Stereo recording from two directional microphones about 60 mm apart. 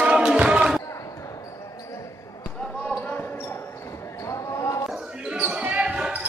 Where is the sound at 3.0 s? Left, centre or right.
Left.